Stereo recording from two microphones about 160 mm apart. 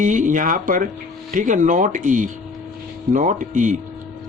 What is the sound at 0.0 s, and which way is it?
Speech, 50° right (ahead or behind).